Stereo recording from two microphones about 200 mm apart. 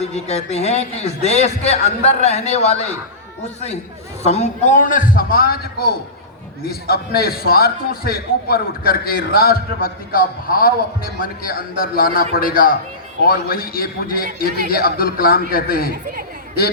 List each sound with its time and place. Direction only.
0.0 s a man's voice: 35° left (ahead or behind)
4.2 s a man's voice: 35° left (ahead or behind)